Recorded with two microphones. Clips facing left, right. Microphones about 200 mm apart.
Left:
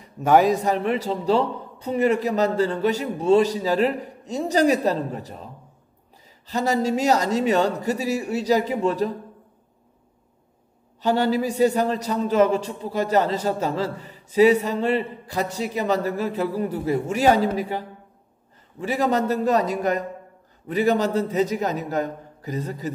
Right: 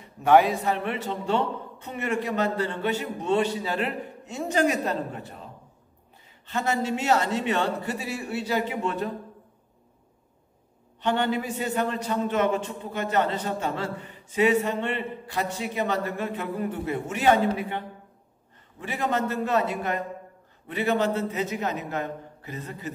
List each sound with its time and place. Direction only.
0.0 s a man's voice: 40° left (ahead or behind)
6.4 s a man's voice: 35° left (ahead or behind)
11.0 s a man's voice: 35° left (ahead or behind)
18.9 s a man's voice: 40° left (ahead or behind)